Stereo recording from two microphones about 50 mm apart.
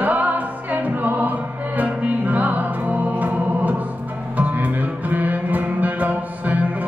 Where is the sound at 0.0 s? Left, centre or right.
Right.